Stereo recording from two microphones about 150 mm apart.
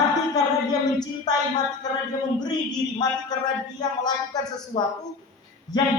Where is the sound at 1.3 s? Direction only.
25° left (ahead or behind).